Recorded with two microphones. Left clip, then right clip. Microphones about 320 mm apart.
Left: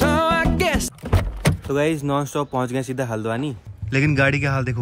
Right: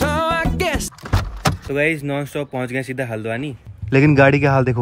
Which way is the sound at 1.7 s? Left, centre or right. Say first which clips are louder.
Even; centre.